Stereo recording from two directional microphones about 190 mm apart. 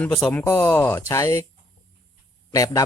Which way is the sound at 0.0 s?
10° left (ahead or behind).